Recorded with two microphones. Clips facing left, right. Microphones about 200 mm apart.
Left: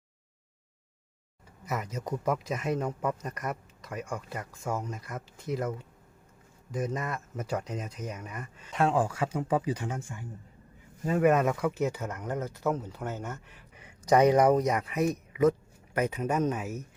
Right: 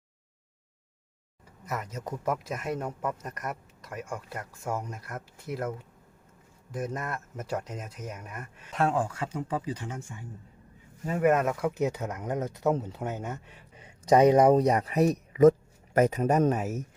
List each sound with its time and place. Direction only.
1.6 s speech: centre (ahead or behind)
11.2 s speech: 5° right (ahead or behind)
11.7 s speech: 15° right (ahead or behind); by 15.1 s 35° right (ahead or behind)
15.3 s a sound: 45° right (ahead or behind)
16.0 s speech: 45° right (ahead or behind)